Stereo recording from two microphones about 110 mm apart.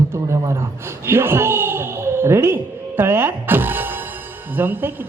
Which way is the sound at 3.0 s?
20° right (ahead or behind).